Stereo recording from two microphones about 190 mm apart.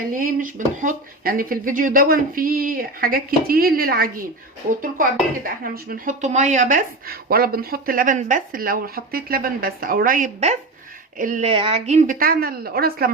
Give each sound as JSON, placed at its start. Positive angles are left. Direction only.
{"t": 0.1, "sound": "a woman's voice", "side_deg": -45}
{"t": 12.2, "sound": "speech", "side_deg": -50}